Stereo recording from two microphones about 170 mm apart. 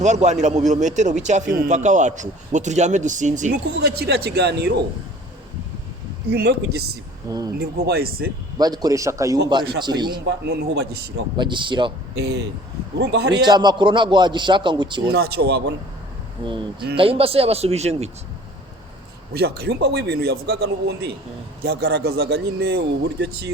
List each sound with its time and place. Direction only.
0.0 s a man's voice: 45° right (ahead or behind)
3.5 s a man's voice: 65° right (ahead or behind)
6.3 s a man's voice: 75° right (ahead or behind)
7.3 s a man's voice: 20° right (ahead or behind)
7.6 s speech: 65° right (ahead or behind)
8.5 s a man's voice: 25° right (ahead or behind)
10.2 s a man's voice: 75° right (ahead or behind)
11.3 s a man's voice: 30° right (ahead or behind)
12.1 s a man's voice: 85° right
13.4 s a man's voice: 25° right (ahead or behind)
15.1 s a man's voice: 70° right (ahead or behind)
16.4 s a man's voice: 30° right (ahead or behind)
19.3 s a man's voice: 70° right (ahead or behind)